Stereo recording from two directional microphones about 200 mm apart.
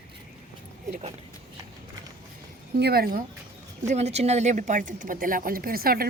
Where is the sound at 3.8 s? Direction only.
35° right (ahead or behind).